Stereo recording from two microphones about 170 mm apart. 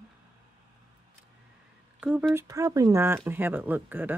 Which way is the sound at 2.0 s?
10° right (ahead or behind).